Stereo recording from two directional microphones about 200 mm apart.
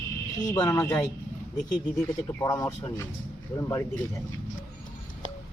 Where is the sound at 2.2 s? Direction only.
15° left (ahead or behind).